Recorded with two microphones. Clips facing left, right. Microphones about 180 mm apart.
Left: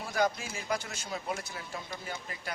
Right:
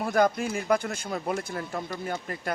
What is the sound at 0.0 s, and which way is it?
Speech, 55° right (ahead or behind).